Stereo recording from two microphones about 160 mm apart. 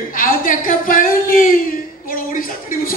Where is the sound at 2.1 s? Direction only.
60° left (ahead or behind).